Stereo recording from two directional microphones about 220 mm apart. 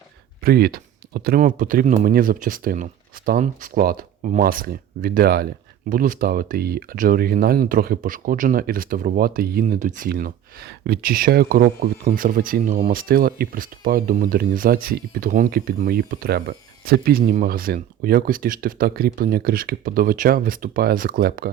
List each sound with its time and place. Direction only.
0.4 s speech: 45° right (ahead or behind)